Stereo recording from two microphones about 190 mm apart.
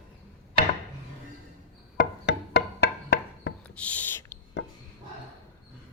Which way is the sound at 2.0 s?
60° left (ahead or behind).